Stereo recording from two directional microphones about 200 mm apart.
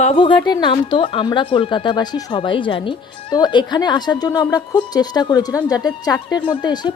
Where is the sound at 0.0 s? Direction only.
30° left (ahead or behind).